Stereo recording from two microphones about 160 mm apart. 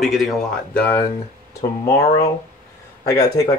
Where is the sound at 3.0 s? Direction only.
20° left (ahead or behind).